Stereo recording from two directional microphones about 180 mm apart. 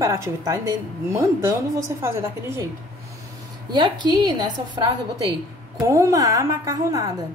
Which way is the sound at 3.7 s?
25° right (ahead or behind).